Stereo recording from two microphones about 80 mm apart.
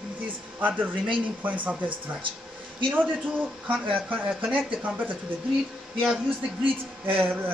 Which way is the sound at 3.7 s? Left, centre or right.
Centre.